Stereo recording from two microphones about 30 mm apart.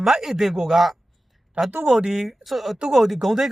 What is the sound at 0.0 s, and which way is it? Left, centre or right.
Speech, centre.